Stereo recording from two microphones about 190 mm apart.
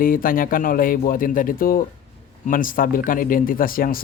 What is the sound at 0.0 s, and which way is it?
Speech, 50° left (ahead or behind).